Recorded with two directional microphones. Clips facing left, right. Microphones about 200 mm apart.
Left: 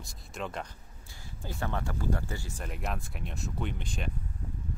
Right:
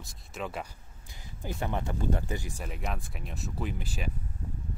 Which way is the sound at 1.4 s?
15° right (ahead or behind).